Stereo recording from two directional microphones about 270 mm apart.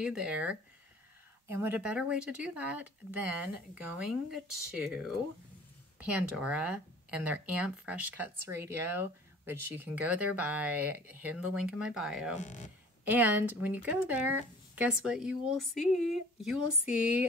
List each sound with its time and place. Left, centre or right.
0.0 s speech: centre
12.4 s speech: left
13.0 s a woman's voice: centre